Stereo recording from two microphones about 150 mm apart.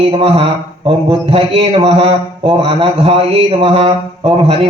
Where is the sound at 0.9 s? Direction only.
35° right (ahead or behind).